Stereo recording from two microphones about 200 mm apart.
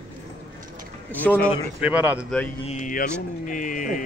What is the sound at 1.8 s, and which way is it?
Music, 10° right (ahead or behind).